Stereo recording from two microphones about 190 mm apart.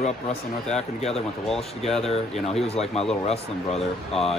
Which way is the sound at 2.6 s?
35° left (ahead or behind).